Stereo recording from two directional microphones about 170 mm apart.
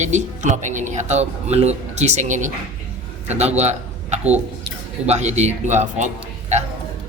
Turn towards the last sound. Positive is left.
turn(degrees=-45)  # may be behind; listen again after turning